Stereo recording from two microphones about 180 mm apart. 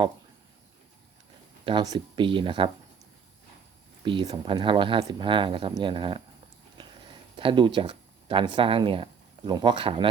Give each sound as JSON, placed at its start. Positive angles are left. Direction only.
{"t": 1.6, "sound": "speech", "side_deg": -25}
{"t": 4.0, "sound": "speech", "side_deg": -25}
{"t": 7.3, "sound": "speech", "side_deg": -25}